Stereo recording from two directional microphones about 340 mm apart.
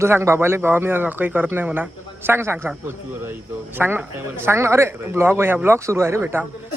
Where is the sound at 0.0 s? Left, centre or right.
Centre.